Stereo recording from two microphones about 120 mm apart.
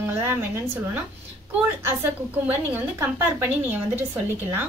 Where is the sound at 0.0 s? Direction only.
20° right (ahead or behind).